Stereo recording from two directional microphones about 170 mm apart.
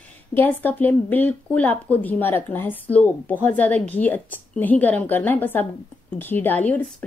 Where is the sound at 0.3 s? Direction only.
10° left (ahead or behind).